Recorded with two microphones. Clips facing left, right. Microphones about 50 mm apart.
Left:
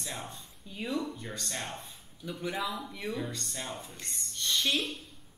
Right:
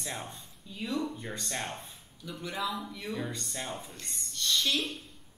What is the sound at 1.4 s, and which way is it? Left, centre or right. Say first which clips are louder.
Speech: right 2 dB; centre.